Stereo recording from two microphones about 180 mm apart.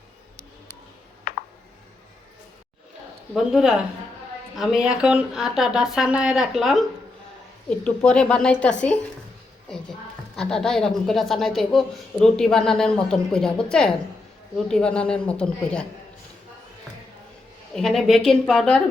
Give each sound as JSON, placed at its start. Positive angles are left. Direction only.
{"t": 1.3, "sound": "a sound", "side_deg": 50}
{"t": 3.3, "sound": "speech", "side_deg": 0}
{"t": 10.3, "sound": "speech", "side_deg": 5}
{"t": 17.7, "sound": "speech", "side_deg": 0}